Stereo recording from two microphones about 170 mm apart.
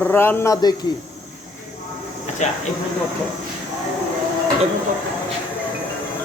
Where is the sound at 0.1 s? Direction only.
15° left (ahead or behind).